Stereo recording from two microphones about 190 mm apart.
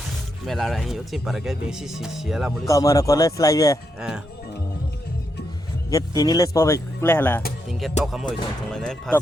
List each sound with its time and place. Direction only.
0.0 s speech: centre (ahead or behind)
2.6 s speech: 15° left (ahead or behind)
5.9 s speech: 20° left (ahead or behind)
7.7 s speech: centre (ahead or behind)